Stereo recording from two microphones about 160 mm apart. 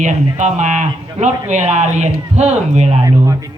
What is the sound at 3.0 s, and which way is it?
Speech, 20° right (ahead or behind).